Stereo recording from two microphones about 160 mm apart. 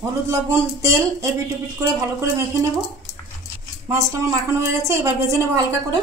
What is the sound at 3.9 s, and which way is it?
A woman's voice, 20° right (ahead or behind).